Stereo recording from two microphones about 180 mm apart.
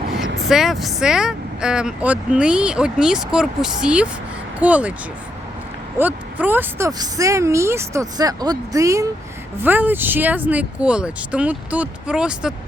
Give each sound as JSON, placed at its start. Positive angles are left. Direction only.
{"t": 0.4, "sound": "a woman's voice", "side_deg": 0}
{"t": 6.0, "sound": "a woman's voice", "side_deg": -10}